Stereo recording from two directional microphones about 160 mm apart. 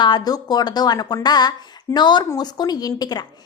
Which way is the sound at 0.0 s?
25° left (ahead or behind).